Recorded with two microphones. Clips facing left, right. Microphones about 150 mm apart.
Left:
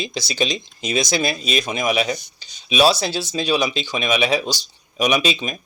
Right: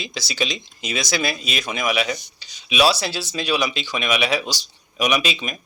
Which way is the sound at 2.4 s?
50° left (ahead or behind).